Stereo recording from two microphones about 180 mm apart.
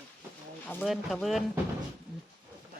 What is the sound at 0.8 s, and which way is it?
Speech, centre (ahead or behind).